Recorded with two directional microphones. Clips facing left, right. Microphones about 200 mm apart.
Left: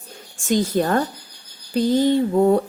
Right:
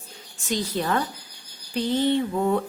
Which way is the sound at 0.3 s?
50° left (ahead or behind).